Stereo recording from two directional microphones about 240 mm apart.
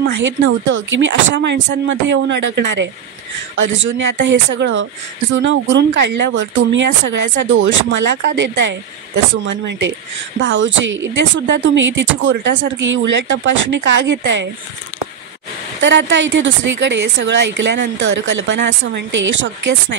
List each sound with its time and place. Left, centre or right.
0.0 s speech: right
15.8 s speech: right